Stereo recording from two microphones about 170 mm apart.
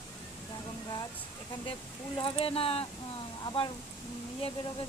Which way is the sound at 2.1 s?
30° left (ahead or behind).